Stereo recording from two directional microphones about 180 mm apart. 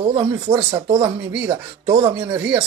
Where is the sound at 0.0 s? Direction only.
25° right (ahead or behind).